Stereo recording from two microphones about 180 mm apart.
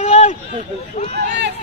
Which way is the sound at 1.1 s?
75° right (ahead or behind).